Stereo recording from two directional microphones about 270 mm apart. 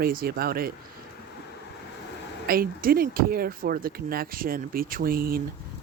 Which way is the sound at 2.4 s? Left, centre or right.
Right.